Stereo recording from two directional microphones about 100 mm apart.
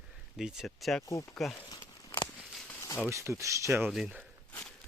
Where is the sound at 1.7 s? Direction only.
45° left (ahead or behind).